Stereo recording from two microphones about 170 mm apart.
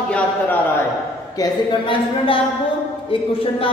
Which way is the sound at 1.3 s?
25° left (ahead or behind).